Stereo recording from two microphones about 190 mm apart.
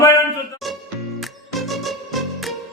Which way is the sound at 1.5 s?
Centre (ahead or behind).